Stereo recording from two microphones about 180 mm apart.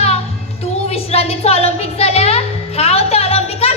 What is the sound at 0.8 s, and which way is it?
Music, 35° left (ahead or behind).